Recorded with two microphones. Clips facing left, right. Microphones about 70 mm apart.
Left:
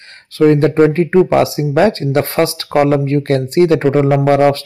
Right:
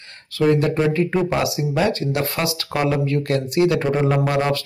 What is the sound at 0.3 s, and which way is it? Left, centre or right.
Speech, left.